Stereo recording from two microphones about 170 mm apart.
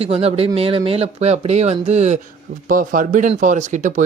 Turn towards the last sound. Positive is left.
turn(degrees=-45)  # may be behind; listen again after turning